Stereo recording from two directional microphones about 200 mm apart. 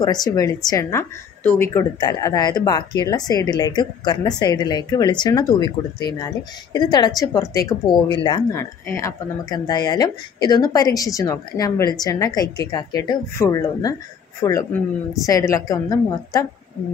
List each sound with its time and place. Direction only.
0.0 s a woman's voice: 20° left (ahead or behind)